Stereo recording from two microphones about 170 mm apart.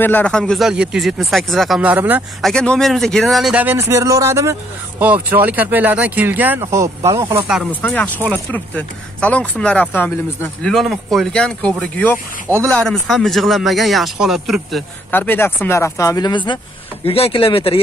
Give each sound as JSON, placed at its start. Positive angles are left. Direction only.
{"t": 0.0, "sound": "speech", "side_deg": 10}
{"t": 2.4, "sound": "speech", "side_deg": 5}
{"t": 3.9, "sound": "speech", "side_deg": -15}
{"t": 7.7, "sound": "speech", "side_deg": 10}
{"t": 15.0, "sound": "speech", "side_deg": 10}